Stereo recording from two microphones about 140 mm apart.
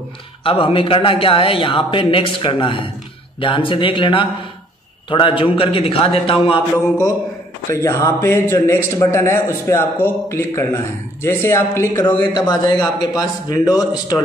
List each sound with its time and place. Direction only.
0.4 s a man's voice: 40° left (ahead or behind)
7.7 s a man's voice: 20° left (ahead or behind)
12.4 s a man's voice: 30° left (ahead or behind)